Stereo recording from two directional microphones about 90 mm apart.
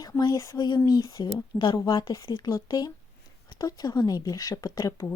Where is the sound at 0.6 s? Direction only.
50° left (ahead or behind).